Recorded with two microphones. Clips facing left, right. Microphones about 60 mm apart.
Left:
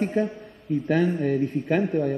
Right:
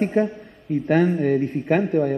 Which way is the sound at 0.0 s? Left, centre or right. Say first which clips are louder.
Right 4 dB; right.